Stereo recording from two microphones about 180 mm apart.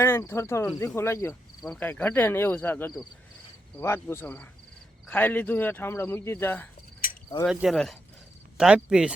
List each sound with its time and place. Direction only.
0.0 s speech: 15° left (ahead or behind)
1.6 s speech: centre (ahead or behind)
7.0 s cricket: 50° left (ahead or behind)
7.4 s speech: centre (ahead or behind)